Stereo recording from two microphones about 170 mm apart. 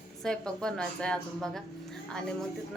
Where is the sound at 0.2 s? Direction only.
5° left (ahead or behind).